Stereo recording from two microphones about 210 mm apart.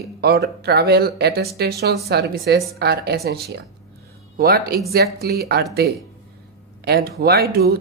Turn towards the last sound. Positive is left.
turn(degrees=-50)  # may be behind; listen again after turning